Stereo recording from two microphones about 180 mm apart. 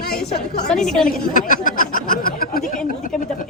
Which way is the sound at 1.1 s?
55° left (ahead or behind).